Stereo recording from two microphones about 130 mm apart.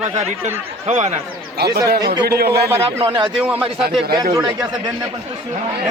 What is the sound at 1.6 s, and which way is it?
Speech, 35° right (ahead or behind).